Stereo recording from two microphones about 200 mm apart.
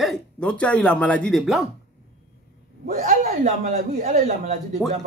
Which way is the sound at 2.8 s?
40° right (ahead or behind).